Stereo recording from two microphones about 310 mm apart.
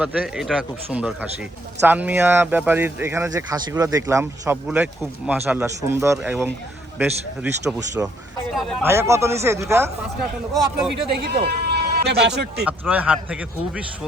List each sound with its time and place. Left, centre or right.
0.0 s speech: centre
11.2 s speech: right
12.6 s speech: centre